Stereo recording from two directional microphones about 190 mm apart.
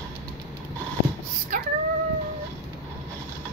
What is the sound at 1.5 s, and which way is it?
Dog, 45° right (ahead or behind).